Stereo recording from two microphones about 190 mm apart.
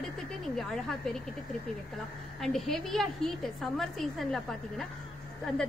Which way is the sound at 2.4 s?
Centre (ahead or behind).